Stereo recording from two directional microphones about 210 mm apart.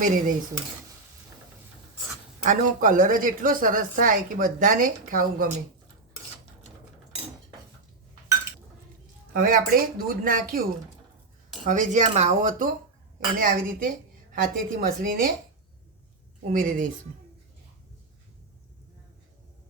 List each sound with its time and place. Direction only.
2.4 s a woman's voice: 40° right (ahead or behind)
9.3 s speech: 40° right (ahead or behind)
11.6 s a woman's voice: 35° right (ahead or behind)
16.5 s a woman's voice: 40° right (ahead or behind)